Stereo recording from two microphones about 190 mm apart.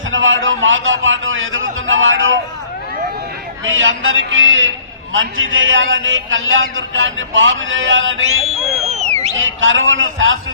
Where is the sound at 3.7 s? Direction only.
90° right.